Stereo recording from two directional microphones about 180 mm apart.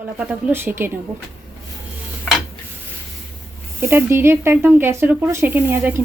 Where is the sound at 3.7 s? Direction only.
15° right (ahead or behind).